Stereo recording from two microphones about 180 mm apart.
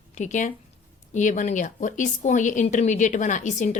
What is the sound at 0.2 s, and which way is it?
A woman's voice, 40° left (ahead or behind).